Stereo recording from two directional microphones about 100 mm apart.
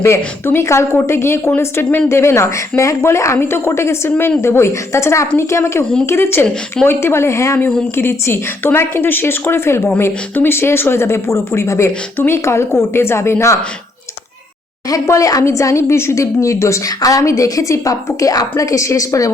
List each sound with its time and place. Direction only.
0.4 s speech: 25° left (ahead or behind)
14.8 s a woman's voice: 35° left (ahead or behind)